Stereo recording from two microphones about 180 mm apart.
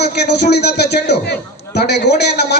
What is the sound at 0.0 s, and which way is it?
A man's voice, 65° left (ahead or behind).